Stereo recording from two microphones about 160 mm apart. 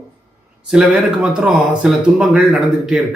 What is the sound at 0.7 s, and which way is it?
A man's voice, 5° right (ahead or behind).